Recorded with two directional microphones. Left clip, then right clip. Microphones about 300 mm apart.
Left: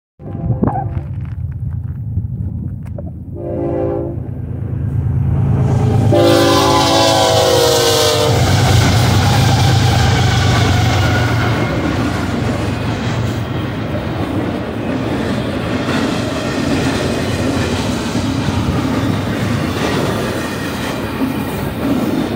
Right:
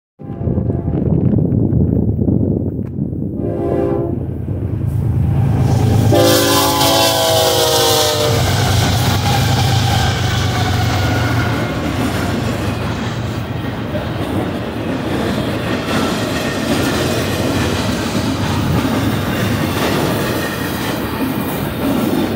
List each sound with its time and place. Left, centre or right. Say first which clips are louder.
3.6 s train: right 1 dB; right
5.6 s train: even; right; by 8.3 s centre